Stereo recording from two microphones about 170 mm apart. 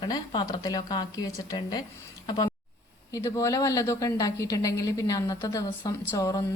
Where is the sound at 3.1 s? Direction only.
20° left (ahead or behind).